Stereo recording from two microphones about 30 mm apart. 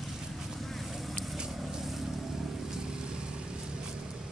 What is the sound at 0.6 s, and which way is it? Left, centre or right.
Vehicle, centre.